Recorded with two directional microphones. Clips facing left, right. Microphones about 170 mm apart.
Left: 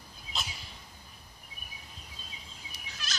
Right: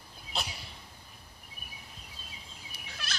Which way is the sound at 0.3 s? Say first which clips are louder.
Right 3 dB; 60° right (ahead or behind).